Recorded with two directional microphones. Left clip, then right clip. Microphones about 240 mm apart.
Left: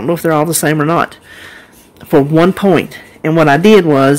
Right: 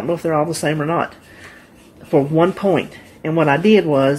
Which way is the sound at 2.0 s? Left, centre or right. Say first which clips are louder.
Left 5 dB; left.